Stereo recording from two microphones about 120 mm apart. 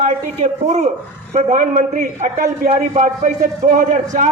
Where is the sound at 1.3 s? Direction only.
70° right (ahead or behind).